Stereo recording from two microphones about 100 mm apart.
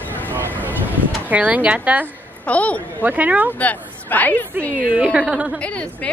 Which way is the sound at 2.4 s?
15° left (ahead or behind).